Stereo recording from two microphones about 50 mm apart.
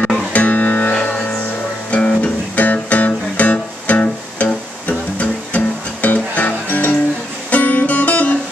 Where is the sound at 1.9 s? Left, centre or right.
Left.